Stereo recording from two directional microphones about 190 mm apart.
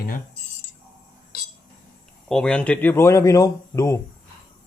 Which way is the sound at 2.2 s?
5° left (ahead or behind).